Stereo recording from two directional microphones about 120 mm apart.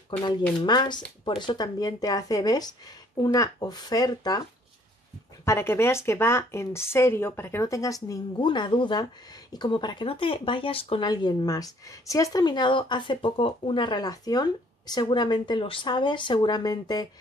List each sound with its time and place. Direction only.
0.7 s speech: 40° left (ahead or behind)
5.4 s a woman's voice: 20° left (ahead or behind)
8.4 s speech: 40° left (ahead or behind)
11.1 s speech: 35° left (ahead or behind)